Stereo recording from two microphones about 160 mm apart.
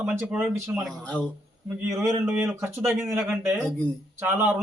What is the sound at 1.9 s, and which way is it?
A man's voice, 20° right (ahead or behind).